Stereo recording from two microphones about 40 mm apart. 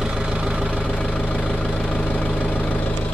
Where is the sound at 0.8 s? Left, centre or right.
Left.